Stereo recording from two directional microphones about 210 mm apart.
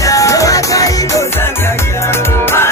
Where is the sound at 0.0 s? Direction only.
15° left (ahead or behind).